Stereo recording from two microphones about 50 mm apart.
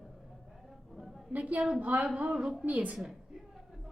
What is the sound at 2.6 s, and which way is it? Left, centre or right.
Speech, right.